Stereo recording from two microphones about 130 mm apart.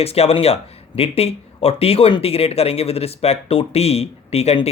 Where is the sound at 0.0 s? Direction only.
50° left (ahead or behind).